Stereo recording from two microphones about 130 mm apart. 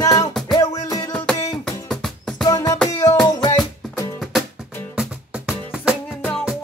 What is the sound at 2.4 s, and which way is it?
Music, 30° left (ahead or behind).